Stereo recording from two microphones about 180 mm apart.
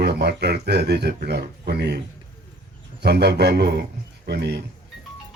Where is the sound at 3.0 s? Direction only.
65° right (ahead or behind).